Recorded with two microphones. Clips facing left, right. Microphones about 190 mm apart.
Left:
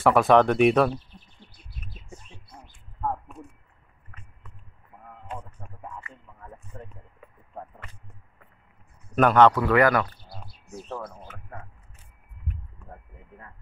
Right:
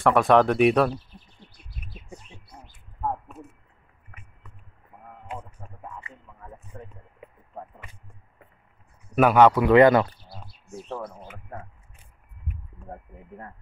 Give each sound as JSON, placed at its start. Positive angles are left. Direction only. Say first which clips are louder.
{"t": 0.0, "sound": "speech", "louder": "even", "side_deg": 0}
{"t": 2.7, "sound": "a sound", "louder": "even", "side_deg": -10}
{"t": 5.3, "sound": "radio", "louder": "right 1 dB", "side_deg": -10}
{"t": 6.7, "sound": "speech", "louder": "right 1 dB", "side_deg": -5}
{"t": 9.1, "sound": "speech", "louder": "right 1 dB", "side_deg": -10}
{"t": 10.9, "sound": "speech", "louder": "right 2 dB", "side_deg": -5}